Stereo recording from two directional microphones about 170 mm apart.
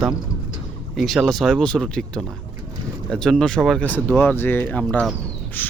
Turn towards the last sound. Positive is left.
turn(degrees=10)  # may be behind; listen again after turning